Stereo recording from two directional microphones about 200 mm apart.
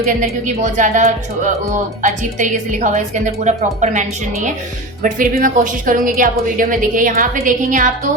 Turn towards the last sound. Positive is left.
turn(degrees=-40)  # may be behind; listen again after turning